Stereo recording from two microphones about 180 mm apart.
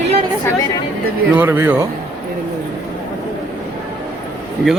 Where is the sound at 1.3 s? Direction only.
10° right (ahead or behind).